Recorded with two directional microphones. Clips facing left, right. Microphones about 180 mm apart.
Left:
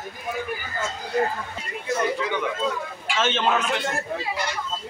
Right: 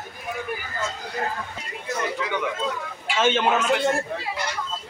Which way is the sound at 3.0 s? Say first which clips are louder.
Right 4 dB; 10° right (ahead or behind).